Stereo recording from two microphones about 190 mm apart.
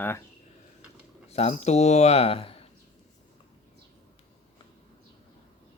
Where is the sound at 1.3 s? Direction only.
35° left (ahead or behind).